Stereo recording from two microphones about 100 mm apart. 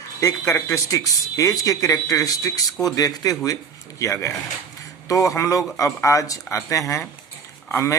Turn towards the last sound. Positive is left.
turn(degrees=25)  # may be behind; listen again after turning